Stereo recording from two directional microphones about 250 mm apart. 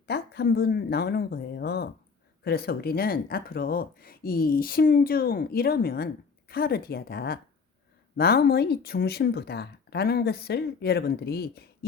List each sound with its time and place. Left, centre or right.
0.1 s speech: left